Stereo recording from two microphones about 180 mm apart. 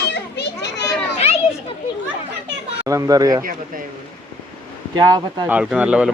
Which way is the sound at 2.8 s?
20° right (ahead or behind).